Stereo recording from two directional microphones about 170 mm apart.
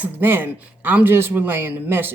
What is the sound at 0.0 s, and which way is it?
Speech, 10° right (ahead or behind).